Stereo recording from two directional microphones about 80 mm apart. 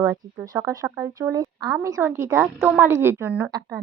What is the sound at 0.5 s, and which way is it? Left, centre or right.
Speech, right.